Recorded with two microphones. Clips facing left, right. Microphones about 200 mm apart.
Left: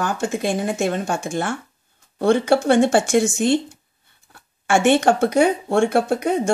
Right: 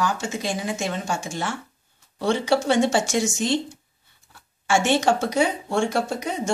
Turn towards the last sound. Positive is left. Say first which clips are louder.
# left 6 dB
turn(degrees=55)  # may be behind; listen again after turning